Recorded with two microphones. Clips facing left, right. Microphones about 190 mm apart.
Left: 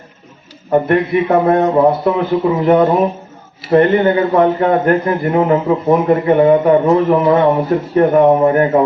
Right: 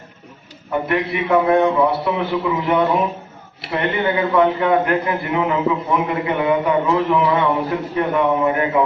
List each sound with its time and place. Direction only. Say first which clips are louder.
0.7 s a man's voice: left 8 dB; 45° left (ahead or behind)